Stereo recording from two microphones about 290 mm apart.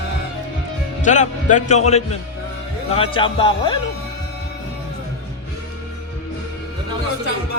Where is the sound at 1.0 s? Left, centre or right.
Left.